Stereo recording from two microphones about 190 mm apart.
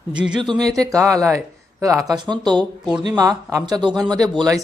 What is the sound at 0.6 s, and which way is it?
Speech, 20° right (ahead or behind).